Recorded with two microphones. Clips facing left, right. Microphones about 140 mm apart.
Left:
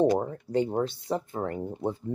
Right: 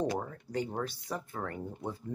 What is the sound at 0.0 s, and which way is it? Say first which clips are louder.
Speech: left 9 dB; 25° left (ahead or behind).